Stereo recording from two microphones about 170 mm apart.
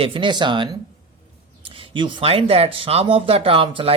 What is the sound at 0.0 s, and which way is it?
Speech, 30° right (ahead or behind).